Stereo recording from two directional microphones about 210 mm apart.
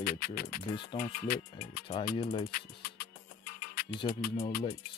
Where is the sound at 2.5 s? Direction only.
45° left (ahead or behind).